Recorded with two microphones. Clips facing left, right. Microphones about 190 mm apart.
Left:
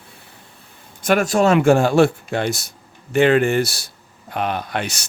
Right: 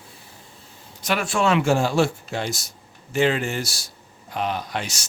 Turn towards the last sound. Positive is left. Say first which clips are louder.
# left 4 dB
turn(degrees=60)  # may be behind; listen again after turning